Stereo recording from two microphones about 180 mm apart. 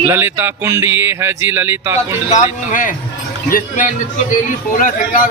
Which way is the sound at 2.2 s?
45° left (ahead or behind).